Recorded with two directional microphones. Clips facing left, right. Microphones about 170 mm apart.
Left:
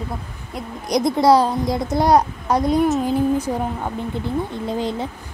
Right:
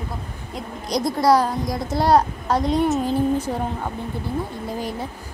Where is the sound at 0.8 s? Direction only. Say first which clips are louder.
Left 3 dB; 20° left (ahead or behind).